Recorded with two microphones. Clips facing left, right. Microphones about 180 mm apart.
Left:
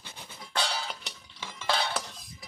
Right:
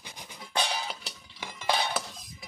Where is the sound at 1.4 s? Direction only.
15° right (ahead or behind).